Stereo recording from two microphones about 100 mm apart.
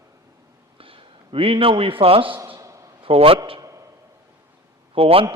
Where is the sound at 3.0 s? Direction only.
70° right (ahead or behind).